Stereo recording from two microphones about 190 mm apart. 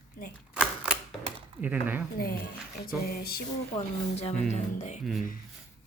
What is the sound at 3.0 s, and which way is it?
Music, 55° left (ahead or behind).